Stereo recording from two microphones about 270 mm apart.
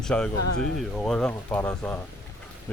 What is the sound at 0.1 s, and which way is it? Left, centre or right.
A man's voice, centre.